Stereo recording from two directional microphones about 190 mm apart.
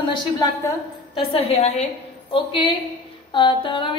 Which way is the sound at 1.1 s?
30° left (ahead or behind).